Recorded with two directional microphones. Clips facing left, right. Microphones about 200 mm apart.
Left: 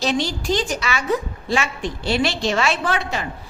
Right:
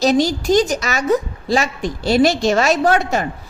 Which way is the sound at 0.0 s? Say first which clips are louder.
Right 7 dB; 40° right (ahead or behind).